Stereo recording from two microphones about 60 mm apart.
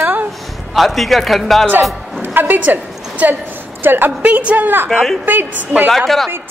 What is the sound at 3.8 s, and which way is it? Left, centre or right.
Speech, right.